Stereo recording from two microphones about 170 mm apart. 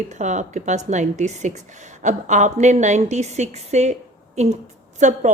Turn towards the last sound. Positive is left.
turn(degrees=-45)  # may be behind; listen again after turning